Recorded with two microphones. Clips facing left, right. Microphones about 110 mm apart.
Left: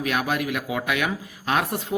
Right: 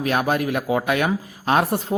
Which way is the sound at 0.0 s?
35° right (ahead or behind).